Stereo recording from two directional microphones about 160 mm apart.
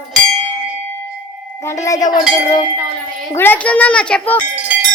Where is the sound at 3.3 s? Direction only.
15° left (ahead or behind).